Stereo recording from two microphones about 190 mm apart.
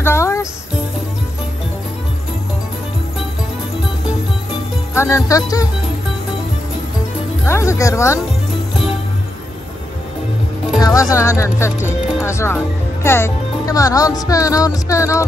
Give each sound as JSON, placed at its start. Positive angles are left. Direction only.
{"t": 0.0, "sound": "music", "side_deg": 15}
{"t": 4.9, "sound": "speech", "side_deg": 15}
{"t": 7.4, "sound": "speech", "side_deg": 15}
{"t": 10.8, "sound": "speech", "side_deg": 20}